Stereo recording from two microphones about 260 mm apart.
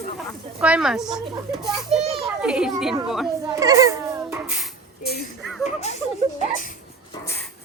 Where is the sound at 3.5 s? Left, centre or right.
Centre.